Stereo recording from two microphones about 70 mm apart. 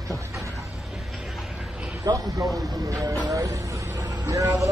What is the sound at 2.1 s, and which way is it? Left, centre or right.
Speech, right.